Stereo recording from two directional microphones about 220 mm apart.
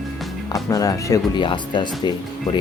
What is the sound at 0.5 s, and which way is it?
Speech, 15° left (ahead or behind).